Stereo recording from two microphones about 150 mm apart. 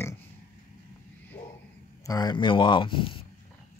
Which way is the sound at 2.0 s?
25° left (ahead or behind).